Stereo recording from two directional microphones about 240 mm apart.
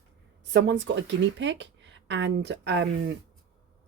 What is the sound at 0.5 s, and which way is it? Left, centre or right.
Speech, right.